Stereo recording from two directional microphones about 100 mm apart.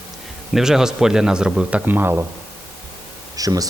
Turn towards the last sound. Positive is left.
turn(degrees=-35)  # may be behind; listen again after turning